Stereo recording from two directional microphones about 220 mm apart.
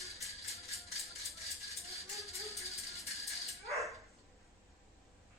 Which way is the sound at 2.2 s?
Centre (ahead or behind).